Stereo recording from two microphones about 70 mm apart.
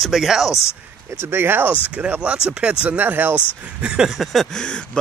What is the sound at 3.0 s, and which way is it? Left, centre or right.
Speech, right.